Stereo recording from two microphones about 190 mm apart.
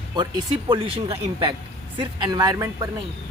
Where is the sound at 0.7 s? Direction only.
30° right (ahead or behind).